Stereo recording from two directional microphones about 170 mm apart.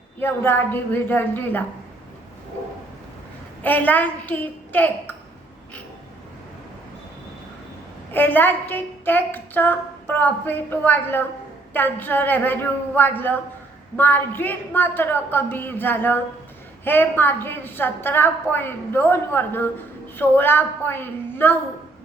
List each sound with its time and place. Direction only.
0.2 s a woman's voice: 10° left (ahead or behind)
3.6 s a woman's voice: 10° left (ahead or behind)
8.1 s a woman's voice: 10° left (ahead or behind)